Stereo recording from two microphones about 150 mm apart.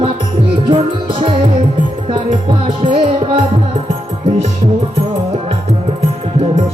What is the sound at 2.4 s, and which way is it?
Music, 35° right (ahead or behind).